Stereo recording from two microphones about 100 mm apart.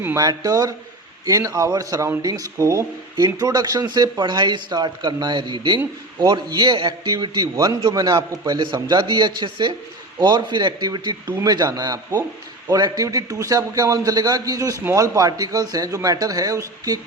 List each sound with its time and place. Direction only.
0.2 s a man's voice: 40° right (ahead or behind)